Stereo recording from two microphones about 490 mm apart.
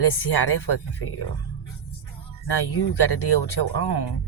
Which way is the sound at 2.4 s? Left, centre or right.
Left.